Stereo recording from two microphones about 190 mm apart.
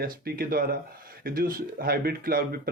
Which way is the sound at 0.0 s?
50° right (ahead or behind).